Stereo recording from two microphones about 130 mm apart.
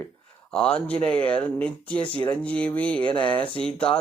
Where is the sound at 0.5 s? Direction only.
5° left (ahead or behind).